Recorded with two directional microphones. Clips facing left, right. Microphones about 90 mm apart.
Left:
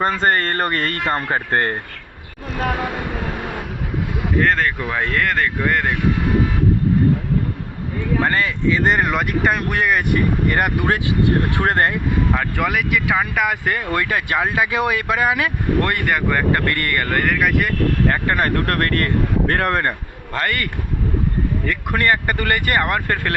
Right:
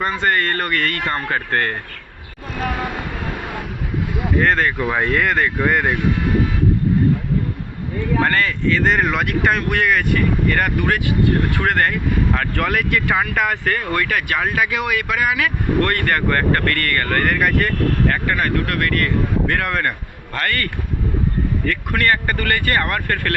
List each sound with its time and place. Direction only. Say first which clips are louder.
0.0 s speech: left 1 dB; 40° left (ahead or behind)
4.4 s speech: right 1 dB; centre (ahead or behind)
8.2 s speech: even; 15° left (ahead or behind)
10.2 s speech: even; 20° left (ahead or behind)
12.3 s speech: even; 10° left (ahead or behind); by 15.9 s 30° left (ahead or behind)
15.9 s speech: right 1 dB; 10° left (ahead or behind)
17.2 s speech: even; centre (ahead or behind)
18.1 s speech: left 1 dB; 30° left (ahead or behind)
20.3 s speech: even; 20° left (ahead or behind)
21.7 s speech: even; 20° left (ahead or behind)